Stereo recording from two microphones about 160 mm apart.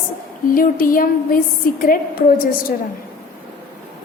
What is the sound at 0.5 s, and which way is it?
A woman's voice, 60° left (ahead or behind).